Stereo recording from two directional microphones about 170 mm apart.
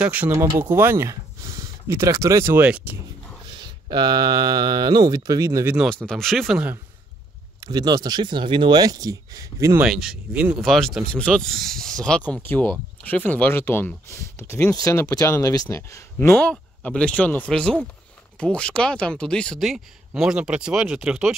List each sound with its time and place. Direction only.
0.0 s speech: 10° right (ahead or behind)
3.4 s speech: 25° right (ahead or behind)
6.0 s speech: centre (ahead or behind)
7.6 s speech: 20° right (ahead or behind)
9.8 s speech: 5° right (ahead or behind)